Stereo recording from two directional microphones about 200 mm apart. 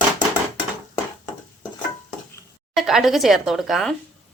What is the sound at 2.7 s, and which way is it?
A woman's voice, centre (ahead or behind).